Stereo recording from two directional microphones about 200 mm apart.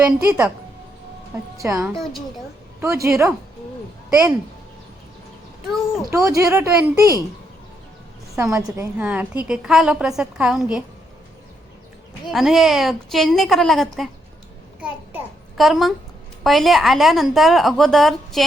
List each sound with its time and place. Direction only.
0.2 s speech: 10° right (ahead or behind)
1.5 s speech: 15° right (ahead or behind)
1.9 s a woman's voice: centre (ahead or behind)
2.8 s speech: 15° right (ahead or behind)
6.1 s speech: 15° right (ahead or behind)
8.4 s a woman's voice: 15° right (ahead or behind)
12.3 s a woman's voice: centre (ahead or behind)
14.8 s a sound: 5° right (ahead or behind)
16.4 s a woman's voice: centre (ahead or behind)